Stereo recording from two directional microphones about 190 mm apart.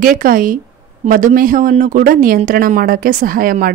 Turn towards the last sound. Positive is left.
turn(degrees=-50)  # may be behind; listen again after turning